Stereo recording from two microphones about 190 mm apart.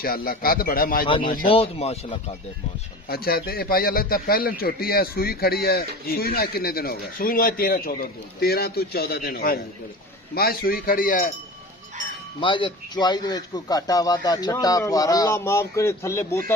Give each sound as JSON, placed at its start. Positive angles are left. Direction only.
{"t": 0.0, "sound": "a man's voice", "side_deg": 50}
{"t": 1.5, "sound": "speech", "side_deg": 30}
{"t": 3.1, "sound": "a man's voice", "side_deg": 50}
{"t": 12.4, "sound": "speech", "side_deg": 25}